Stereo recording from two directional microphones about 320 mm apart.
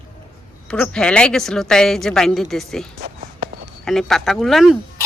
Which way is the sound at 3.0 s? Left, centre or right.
Right.